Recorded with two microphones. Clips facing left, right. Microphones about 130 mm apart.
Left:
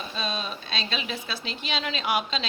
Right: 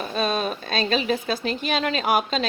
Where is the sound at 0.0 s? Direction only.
55° right (ahead or behind).